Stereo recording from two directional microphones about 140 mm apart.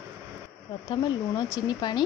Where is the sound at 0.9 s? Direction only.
30° left (ahead or behind).